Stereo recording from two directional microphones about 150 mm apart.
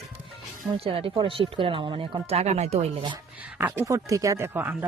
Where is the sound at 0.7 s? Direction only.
40° right (ahead or behind).